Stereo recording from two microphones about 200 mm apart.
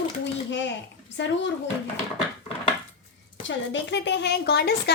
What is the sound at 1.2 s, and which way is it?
Speech, 65° left (ahead or behind).